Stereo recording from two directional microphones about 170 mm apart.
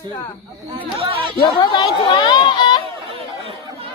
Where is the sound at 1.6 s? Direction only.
25° left (ahead or behind).